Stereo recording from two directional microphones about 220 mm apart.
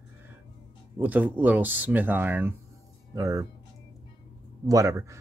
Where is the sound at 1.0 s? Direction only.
5° right (ahead or behind).